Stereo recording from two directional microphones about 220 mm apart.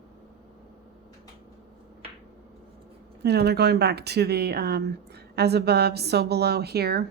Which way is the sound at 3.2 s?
50° right (ahead or behind).